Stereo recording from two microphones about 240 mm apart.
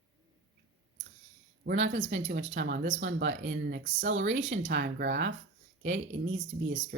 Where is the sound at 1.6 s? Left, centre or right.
Right.